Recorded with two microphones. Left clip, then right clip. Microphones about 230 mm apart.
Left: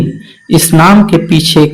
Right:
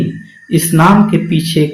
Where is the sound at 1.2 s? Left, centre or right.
Left.